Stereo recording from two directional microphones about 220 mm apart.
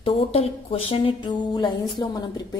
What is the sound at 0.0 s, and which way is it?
A woman's voice, 25° left (ahead or behind).